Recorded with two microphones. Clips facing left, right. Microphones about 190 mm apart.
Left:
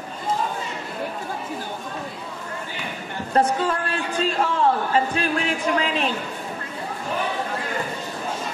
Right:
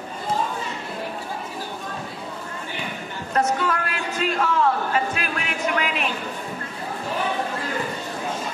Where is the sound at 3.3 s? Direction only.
30° left (ahead or behind).